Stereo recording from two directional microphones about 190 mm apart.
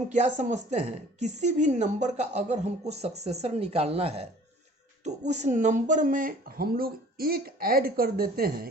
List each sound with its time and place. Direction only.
0.1 s a woman's voice: 40° right (ahead or behind)